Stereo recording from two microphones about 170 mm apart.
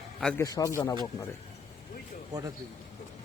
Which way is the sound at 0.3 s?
20° left (ahead or behind).